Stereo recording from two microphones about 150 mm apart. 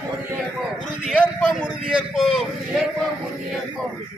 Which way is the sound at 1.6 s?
5° right (ahead or behind).